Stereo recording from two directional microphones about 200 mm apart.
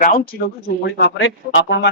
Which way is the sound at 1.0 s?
70° left (ahead or behind).